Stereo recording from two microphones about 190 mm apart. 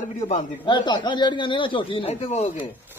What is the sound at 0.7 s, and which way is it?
A man's voice, 25° left (ahead or behind).